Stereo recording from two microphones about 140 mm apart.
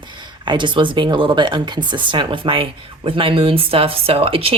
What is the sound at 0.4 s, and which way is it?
Speech, 35° right (ahead or behind).